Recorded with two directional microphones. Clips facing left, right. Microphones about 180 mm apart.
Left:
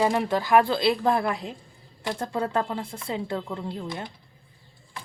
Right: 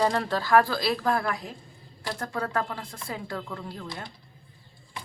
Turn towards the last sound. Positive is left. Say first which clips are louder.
# left 5 dB
turn(degrees=20)  # may be behind; listen again after turning